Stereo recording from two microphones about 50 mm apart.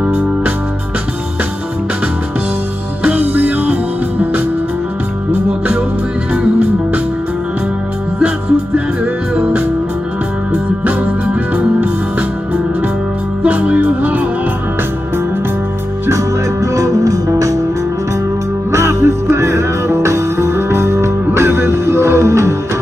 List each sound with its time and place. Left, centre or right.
0.0 s music: right
3.2 s music: right
11.5 s music: right
13.4 s music: right
16.7 s music: right
18.7 s music: right